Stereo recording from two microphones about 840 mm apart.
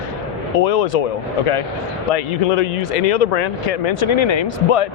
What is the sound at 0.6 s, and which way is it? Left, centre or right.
Speech, left.